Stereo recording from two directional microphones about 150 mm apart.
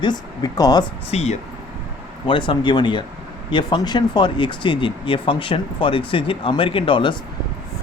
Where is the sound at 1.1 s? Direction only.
45° left (ahead or behind).